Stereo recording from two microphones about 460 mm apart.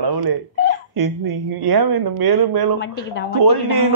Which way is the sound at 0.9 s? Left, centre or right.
Right.